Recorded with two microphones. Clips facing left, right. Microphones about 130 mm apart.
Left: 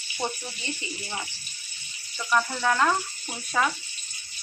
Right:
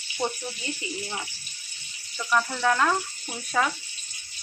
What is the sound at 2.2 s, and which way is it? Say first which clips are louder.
A man's voice: even; centre (ahead or behind).